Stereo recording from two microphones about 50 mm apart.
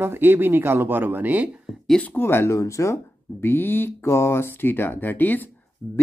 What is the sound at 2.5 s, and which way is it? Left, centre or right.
Speech, left.